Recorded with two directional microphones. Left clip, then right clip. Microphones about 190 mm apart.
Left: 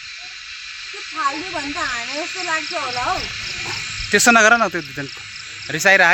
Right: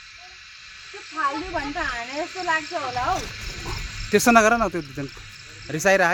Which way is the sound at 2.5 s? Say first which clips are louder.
Left 1 dB; 50° left (ahead or behind).